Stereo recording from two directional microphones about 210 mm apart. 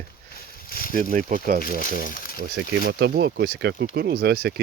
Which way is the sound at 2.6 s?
55° right (ahead or behind).